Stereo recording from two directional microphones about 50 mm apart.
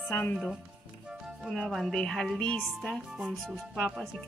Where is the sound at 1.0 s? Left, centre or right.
Centre.